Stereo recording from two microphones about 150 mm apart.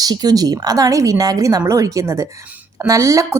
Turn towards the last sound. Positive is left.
turn(degrees=-20)  # may be behind; listen again after turning